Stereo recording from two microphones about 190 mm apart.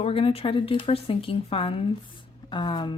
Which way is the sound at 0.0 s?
30° left (ahead or behind).